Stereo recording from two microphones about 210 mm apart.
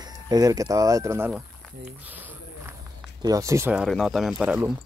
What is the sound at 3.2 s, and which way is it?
Speech, 15° right (ahead or behind).